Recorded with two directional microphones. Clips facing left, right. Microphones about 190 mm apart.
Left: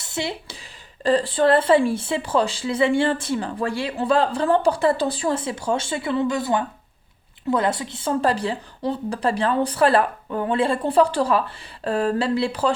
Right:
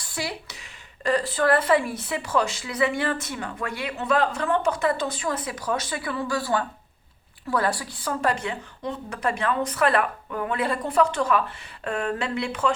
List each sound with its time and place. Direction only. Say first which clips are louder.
0.0 s speech: left 4 dB; 25° left (ahead or behind)